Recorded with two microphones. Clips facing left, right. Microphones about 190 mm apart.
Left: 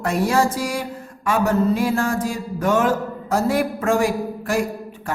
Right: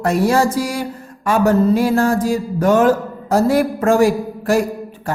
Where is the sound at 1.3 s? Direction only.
35° right (ahead or behind).